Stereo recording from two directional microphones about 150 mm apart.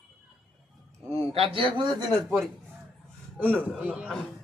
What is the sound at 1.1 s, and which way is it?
A man's voice, 40° right (ahead or behind).